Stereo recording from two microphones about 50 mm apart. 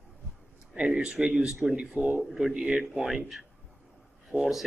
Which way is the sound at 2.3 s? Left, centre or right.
Centre.